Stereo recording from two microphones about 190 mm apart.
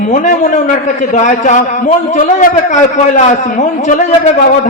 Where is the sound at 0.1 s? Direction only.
40° left (ahead or behind).